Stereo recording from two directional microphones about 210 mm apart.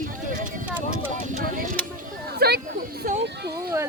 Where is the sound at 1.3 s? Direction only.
40° right (ahead or behind).